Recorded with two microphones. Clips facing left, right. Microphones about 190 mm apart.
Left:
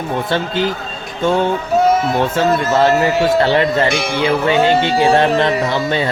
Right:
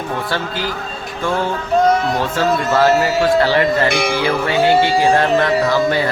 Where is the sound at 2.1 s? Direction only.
25° left (ahead or behind).